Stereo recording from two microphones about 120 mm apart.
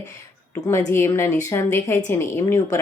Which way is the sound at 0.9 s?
20° left (ahead or behind).